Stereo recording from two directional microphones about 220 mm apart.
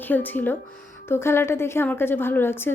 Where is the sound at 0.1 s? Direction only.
10° left (ahead or behind).